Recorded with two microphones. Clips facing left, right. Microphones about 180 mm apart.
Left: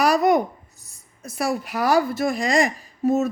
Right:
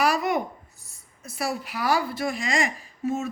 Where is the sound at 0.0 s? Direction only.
40° left (ahead or behind).